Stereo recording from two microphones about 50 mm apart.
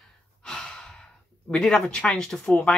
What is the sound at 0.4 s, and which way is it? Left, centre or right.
Breathing, centre.